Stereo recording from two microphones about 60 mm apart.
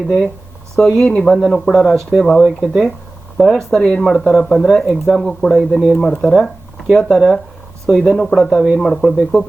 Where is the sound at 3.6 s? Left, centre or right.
Centre.